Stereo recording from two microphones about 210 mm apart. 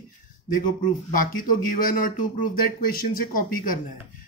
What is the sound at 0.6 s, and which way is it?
Speech, 40° left (ahead or behind).